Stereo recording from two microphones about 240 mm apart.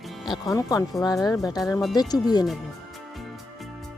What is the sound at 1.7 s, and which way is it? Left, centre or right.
Speech, centre.